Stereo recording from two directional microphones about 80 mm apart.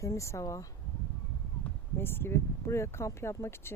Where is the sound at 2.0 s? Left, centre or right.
Left.